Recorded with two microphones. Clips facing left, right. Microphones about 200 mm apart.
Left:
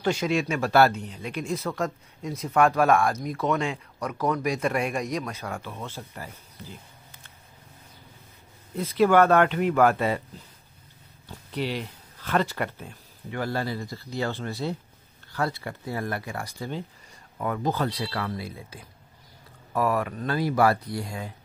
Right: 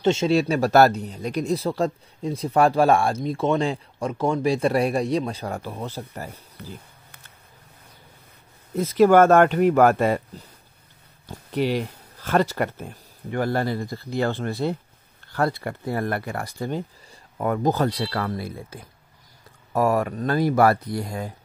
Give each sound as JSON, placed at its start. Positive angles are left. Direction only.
{"t": 0.0, "sound": "speech", "side_deg": -25}
{"t": 8.7, "sound": "speech", "side_deg": -45}
{"t": 11.2, "sound": "speech", "side_deg": -45}